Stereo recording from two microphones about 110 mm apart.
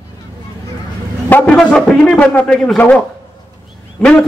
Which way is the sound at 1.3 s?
10° left (ahead or behind).